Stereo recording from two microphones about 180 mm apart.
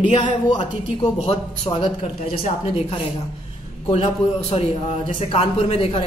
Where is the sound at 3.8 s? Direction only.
35° left (ahead or behind).